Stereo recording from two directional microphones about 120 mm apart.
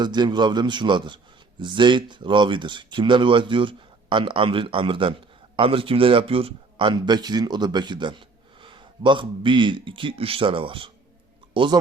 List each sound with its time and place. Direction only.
0.0 s a man's voice: 35° right (ahead or behind)